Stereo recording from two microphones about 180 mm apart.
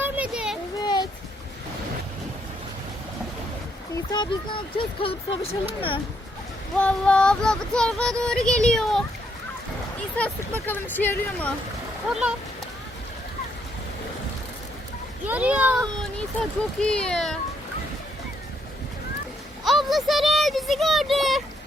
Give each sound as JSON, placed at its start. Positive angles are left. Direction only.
{"t": 0.0, "sound": "a sound", "side_deg": -5}
{"t": 0.8, "sound": "a sound", "side_deg": 25}
{"t": 3.9, "sound": "speech", "side_deg": 25}
{"t": 6.7, "sound": "child singing", "side_deg": 5}
{"t": 10.2, "sound": "speech", "side_deg": 10}
{"t": 12.0, "sound": "child singing", "side_deg": -5}
{"t": 15.3, "sound": "speech", "side_deg": -10}
{"t": 16.1, "sound": "child singing", "side_deg": 5}
{"t": 19.6, "sound": "a sound", "side_deg": 0}